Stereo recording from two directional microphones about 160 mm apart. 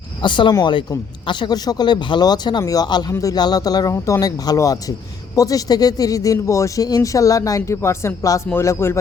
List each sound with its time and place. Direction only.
0.2 s speech: 30° left (ahead or behind)